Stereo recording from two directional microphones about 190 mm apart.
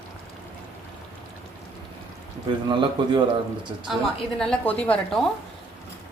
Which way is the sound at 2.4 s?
25° right (ahead or behind).